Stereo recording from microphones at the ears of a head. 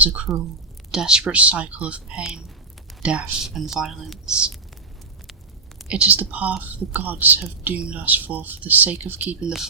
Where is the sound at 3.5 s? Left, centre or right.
Right.